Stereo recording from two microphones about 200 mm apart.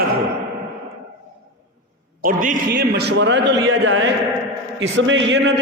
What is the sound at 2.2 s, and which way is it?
A man's voice, 45° right (ahead or behind).